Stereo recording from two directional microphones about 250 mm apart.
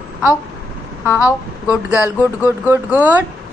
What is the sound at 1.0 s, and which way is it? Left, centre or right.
Speech, centre.